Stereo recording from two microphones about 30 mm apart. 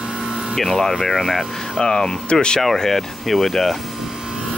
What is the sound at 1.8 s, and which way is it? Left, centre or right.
Speech, left.